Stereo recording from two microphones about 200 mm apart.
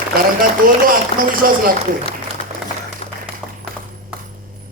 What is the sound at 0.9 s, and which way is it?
Speech, 45° right (ahead or behind).